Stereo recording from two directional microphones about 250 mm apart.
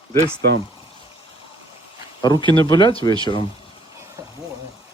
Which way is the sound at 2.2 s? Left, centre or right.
Centre.